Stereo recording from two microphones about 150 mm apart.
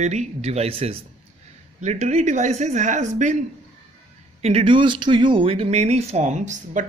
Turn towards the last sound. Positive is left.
turn(degrees=-50)  # may be behind; listen again after turning